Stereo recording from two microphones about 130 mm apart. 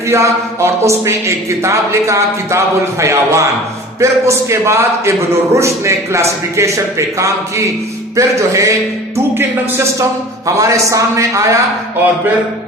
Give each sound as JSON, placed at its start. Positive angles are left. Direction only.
{"t": 0.1, "sound": "a man's voice", "side_deg": -20}
{"t": 8.1, "sound": "a man's voice", "side_deg": -25}